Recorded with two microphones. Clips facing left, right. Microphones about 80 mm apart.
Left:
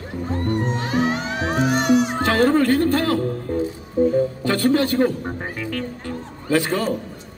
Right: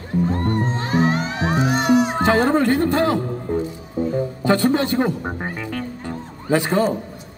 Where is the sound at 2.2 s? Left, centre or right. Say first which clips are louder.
Even; centre.